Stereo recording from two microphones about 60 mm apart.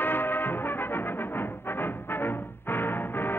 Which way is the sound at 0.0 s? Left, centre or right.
Left.